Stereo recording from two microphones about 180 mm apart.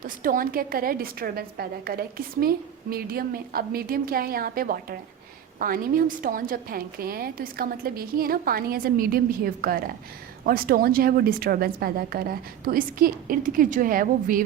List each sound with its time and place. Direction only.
0.0 s a woman's voice: 50° right (ahead or behind)